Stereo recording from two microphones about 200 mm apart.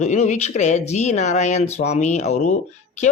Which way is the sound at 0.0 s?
35° left (ahead or behind).